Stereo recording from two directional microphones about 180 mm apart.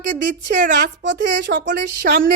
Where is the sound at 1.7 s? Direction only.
65° right (ahead or behind).